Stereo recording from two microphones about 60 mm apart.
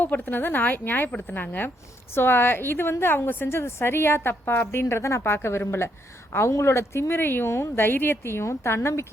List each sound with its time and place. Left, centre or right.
0.0 s a woman's voice: left
7.1 s a woman's voice: left